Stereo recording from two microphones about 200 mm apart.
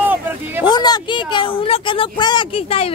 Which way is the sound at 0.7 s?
20° left (ahead or behind).